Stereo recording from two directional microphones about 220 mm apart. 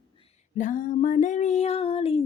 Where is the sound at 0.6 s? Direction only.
35° left (ahead or behind).